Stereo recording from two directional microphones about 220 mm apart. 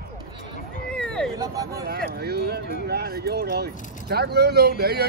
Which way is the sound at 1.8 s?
45° right (ahead or behind).